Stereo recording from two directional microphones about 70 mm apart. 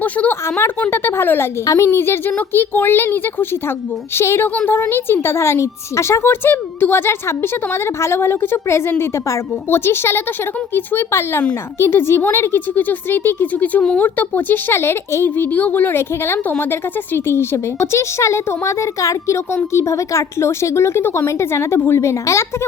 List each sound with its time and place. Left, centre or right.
0.0 s a woman's voice: left
1.6 s a woman's voice: left